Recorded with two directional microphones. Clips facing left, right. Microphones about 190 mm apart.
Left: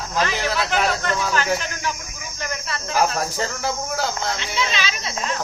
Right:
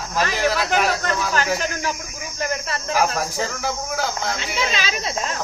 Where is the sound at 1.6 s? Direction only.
40° right (ahead or behind).